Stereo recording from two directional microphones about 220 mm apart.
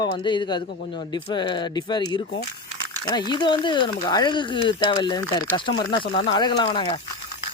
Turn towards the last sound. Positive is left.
turn(degrees=20)  # may be behind; listen again after turning